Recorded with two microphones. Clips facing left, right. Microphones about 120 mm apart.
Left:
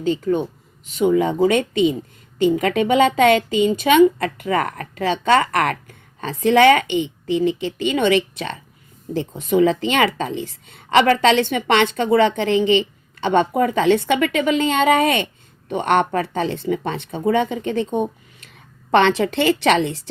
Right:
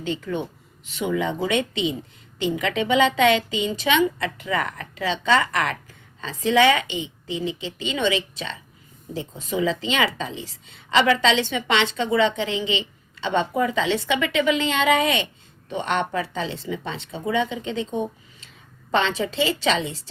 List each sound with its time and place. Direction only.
0.0 s a woman's voice: 40° left (ahead or behind); by 20.0 s 60° left (ahead or behind)